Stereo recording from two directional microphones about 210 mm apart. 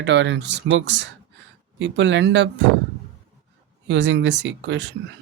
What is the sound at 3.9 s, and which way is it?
Speech, 55° right (ahead or behind).